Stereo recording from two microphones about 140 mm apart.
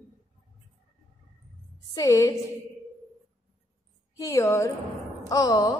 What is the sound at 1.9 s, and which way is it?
Speech, 25° left (ahead or behind).